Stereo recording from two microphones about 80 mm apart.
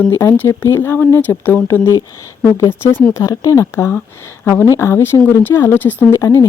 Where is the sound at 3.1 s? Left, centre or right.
Left.